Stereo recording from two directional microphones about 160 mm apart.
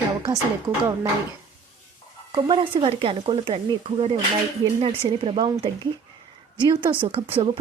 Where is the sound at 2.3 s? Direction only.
30° right (ahead or behind).